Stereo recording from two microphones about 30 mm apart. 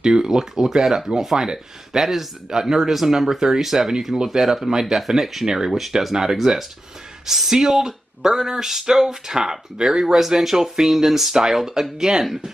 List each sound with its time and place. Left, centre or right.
0.0 s speech: right
5.7 s speech: centre
7.5 s speech: right
10.4 s speech: centre